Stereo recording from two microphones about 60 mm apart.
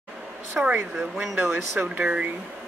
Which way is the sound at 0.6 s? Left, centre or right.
Right.